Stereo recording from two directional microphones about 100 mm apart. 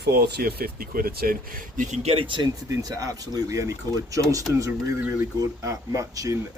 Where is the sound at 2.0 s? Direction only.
90° right.